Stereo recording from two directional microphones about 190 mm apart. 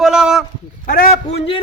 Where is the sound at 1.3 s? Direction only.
30° left (ahead or behind).